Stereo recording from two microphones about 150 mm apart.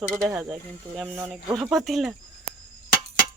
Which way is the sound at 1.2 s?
20° right (ahead or behind).